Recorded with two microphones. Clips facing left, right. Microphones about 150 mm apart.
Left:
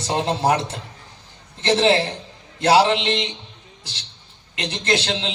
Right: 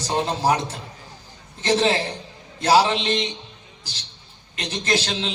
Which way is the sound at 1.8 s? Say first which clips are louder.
Left 3 dB; 75° left (ahead or behind).